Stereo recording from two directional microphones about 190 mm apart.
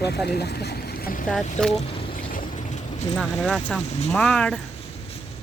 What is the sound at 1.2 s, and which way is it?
Speech, 5° left (ahead or behind).